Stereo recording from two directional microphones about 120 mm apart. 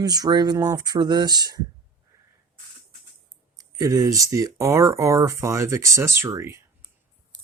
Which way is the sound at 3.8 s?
30° right (ahead or behind).